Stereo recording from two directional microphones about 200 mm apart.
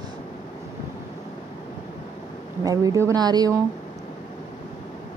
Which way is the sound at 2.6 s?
15° right (ahead or behind).